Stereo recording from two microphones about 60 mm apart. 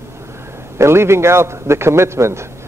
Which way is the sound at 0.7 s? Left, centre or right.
Right.